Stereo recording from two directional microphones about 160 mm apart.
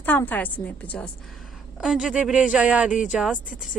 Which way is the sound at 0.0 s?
10° left (ahead or behind).